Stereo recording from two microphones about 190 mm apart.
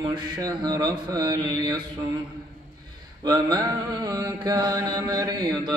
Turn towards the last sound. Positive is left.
turn(degrees=-20)  # may be behind; listen again after turning